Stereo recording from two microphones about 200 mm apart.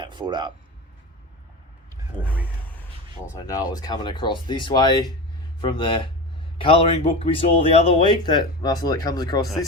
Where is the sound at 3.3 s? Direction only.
15° left (ahead or behind).